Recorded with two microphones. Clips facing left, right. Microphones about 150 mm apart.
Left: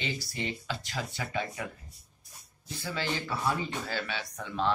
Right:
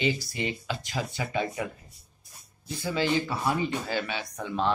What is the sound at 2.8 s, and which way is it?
Speech, 15° right (ahead or behind).